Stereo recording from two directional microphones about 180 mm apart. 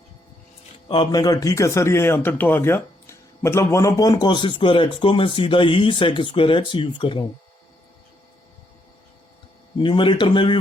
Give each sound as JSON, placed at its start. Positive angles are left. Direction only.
{"t": 0.9, "sound": "a man's voice", "side_deg": 25}
{"t": 9.7, "sound": "a man's voice", "side_deg": 25}